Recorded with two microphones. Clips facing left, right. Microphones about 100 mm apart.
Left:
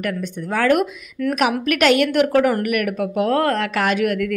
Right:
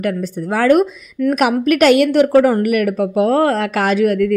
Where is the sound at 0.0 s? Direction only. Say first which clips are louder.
Right 5 dB; 35° right (ahead or behind).